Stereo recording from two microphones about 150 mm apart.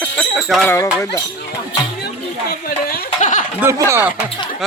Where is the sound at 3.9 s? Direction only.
15° right (ahead or behind).